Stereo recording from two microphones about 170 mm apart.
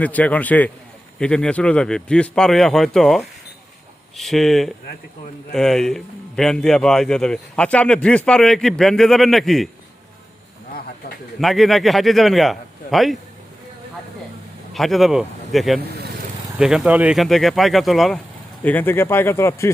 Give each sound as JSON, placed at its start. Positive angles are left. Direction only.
{"t": 0.0, "sound": "a man's voice", "side_deg": 10}
{"t": 11.3, "sound": "a man's voice", "side_deg": 0}
{"t": 14.7, "sound": "a man's voice", "side_deg": 0}
{"t": 18.6, "sound": "speech", "side_deg": 10}